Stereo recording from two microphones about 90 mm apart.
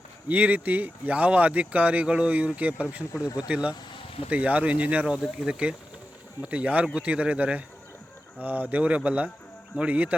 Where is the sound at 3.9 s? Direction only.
80° left.